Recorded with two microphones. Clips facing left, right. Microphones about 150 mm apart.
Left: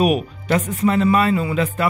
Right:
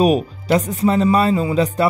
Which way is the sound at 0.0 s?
35° right (ahead or behind).